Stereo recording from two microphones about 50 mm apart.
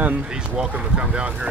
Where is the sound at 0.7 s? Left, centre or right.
Right.